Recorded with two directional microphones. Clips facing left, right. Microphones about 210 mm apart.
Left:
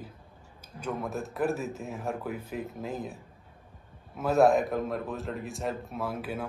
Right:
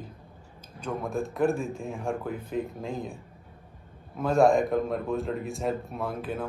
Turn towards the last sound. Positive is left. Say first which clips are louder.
# right 2 dB
turn(degrees=5)  # may be behind; listen again after turning